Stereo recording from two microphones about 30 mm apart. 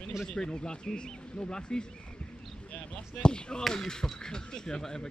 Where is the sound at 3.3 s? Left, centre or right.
Left.